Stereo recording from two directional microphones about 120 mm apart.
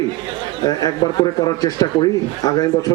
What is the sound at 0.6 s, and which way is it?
A man's voice, 35° left (ahead or behind).